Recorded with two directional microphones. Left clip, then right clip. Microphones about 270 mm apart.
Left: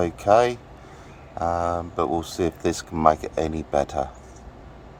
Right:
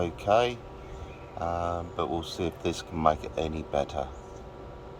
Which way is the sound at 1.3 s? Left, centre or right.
Left.